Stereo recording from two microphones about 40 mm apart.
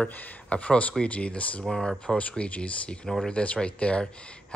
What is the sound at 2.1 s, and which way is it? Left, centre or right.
Speech, left.